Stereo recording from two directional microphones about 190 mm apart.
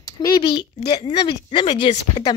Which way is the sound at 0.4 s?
25° left (ahead or behind).